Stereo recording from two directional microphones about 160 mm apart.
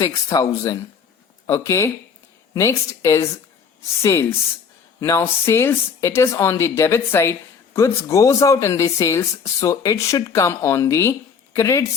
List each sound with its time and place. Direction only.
0.0 s a woman's voice: 20° left (ahead or behind)